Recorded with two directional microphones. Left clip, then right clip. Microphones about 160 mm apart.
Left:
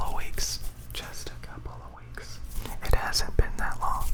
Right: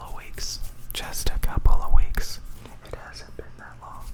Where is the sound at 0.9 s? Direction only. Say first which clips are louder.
Right 6 dB; 40° right (ahead or behind); by 2.2 s 60° right (ahead or behind).